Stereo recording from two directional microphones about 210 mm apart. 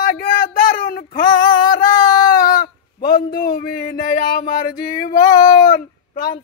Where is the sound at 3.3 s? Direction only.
45° left (ahead or behind).